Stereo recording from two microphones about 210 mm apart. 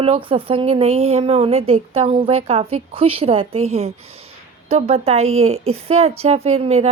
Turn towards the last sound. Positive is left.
turn(degrees=-30)  # may be behind; listen again after turning